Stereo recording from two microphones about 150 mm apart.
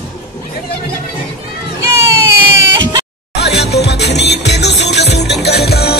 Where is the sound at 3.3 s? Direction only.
90° left.